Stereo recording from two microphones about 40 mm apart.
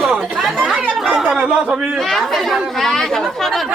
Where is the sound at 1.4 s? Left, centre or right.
Centre.